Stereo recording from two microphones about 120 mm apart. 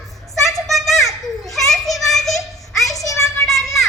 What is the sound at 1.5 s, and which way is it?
Children playing, centre (ahead or behind).